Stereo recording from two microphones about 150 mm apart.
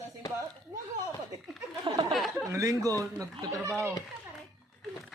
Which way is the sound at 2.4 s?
20° right (ahead or behind).